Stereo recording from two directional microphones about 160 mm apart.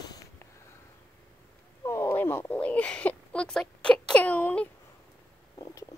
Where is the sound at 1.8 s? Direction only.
20° left (ahead or behind).